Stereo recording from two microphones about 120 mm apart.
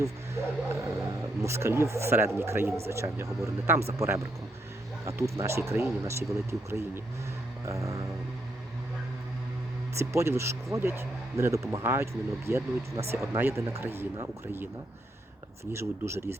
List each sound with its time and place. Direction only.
0.0 s speech: 25° right (ahead or behind)
10.0 s speech: 25° right (ahead or behind)
15.7 s speech: 20° right (ahead or behind)